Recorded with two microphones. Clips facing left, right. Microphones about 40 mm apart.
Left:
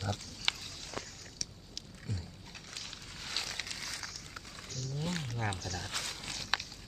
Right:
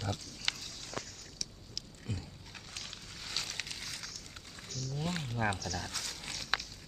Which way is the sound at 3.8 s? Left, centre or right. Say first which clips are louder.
Left 2 dB; left.